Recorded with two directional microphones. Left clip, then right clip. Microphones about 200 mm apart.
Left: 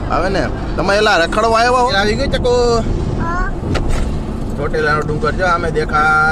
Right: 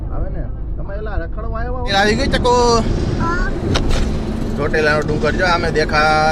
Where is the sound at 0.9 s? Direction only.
45° left (ahead or behind).